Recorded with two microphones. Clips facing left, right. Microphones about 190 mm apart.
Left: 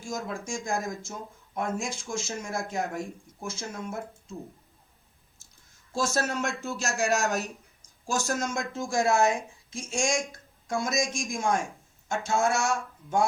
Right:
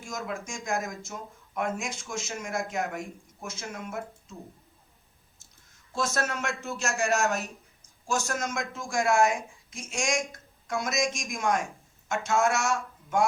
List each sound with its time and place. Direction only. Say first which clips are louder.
0.0 s speech: left 1 dB; 30° left (ahead or behind)
6.0 s speech: left 2 dB; 30° left (ahead or behind)